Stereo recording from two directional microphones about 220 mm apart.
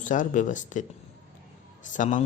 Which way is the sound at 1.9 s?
35° left (ahead or behind).